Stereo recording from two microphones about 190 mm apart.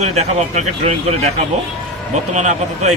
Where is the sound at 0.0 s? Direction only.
35° right (ahead or behind).